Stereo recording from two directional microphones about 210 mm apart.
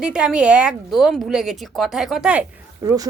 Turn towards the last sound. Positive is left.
turn(degrees=-15)  # may be behind; listen again after turning